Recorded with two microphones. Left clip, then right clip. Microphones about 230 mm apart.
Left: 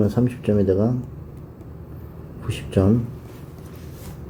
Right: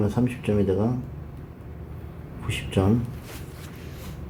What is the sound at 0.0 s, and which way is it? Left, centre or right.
Speech, left.